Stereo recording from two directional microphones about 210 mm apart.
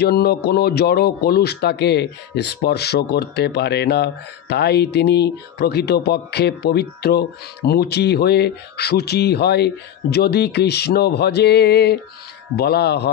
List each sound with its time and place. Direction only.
0.0 s speech: 50° left (ahead or behind)